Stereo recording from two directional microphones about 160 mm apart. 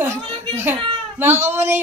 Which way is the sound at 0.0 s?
15° right (ahead or behind).